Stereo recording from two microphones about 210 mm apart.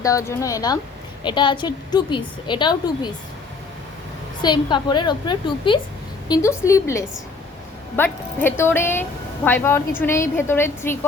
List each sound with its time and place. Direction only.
0.0 s a woman's voice: 15° left (ahead or behind)
4.4 s a woman's voice: 20° left (ahead or behind)